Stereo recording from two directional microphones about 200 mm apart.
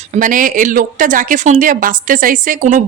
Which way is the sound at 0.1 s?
40° right (ahead or behind).